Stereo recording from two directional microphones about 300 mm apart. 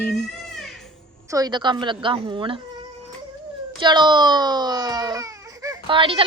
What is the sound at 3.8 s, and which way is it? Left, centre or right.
Speech, centre.